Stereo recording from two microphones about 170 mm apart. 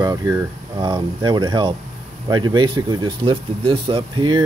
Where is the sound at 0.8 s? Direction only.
25° right (ahead or behind).